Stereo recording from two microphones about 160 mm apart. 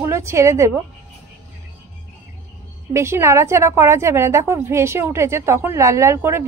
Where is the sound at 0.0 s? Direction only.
15° right (ahead or behind).